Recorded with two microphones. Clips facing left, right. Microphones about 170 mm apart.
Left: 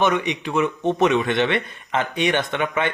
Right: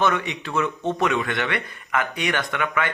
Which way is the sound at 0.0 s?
20° left (ahead or behind).